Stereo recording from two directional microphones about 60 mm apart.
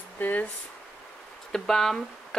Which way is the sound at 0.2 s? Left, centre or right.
Left.